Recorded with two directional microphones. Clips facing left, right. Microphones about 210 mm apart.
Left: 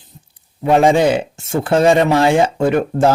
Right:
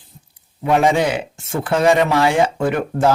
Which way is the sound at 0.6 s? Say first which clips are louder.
Left 4 dB; 30° left (ahead or behind).